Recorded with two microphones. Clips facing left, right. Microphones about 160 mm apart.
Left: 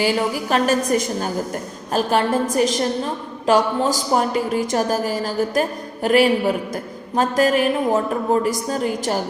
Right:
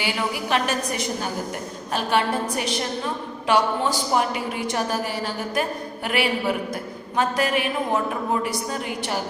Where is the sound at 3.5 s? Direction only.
40° left (ahead or behind).